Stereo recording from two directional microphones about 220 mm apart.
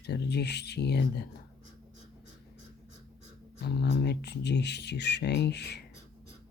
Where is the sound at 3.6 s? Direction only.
45° left (ahead or behind).